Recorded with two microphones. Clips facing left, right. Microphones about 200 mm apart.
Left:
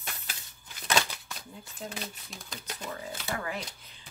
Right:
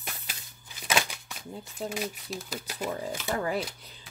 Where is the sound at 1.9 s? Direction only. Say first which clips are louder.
Right 7 dB; 5° right (ahead or behind).